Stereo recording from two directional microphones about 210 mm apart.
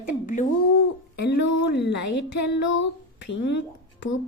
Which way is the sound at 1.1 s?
50° left (ahead or behind).